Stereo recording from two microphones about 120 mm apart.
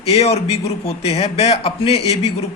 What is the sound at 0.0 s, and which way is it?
A man's voice, 60° left (ahead or behind).